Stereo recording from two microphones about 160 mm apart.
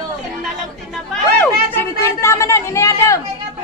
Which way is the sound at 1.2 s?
10° left (ahead or behind).